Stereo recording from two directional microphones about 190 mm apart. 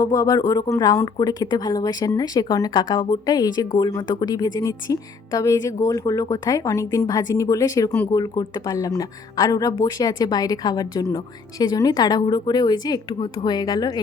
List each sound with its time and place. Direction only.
0.0 s speech: 20° left (ahead or behind)